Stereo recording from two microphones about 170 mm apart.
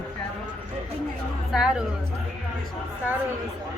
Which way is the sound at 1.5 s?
5° right (ahead or behind).